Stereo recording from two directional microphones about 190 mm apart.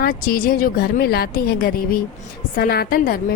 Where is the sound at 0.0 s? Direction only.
45° left (ahead or behind).